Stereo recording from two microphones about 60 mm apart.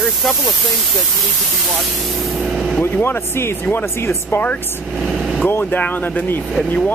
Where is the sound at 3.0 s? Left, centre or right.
Left.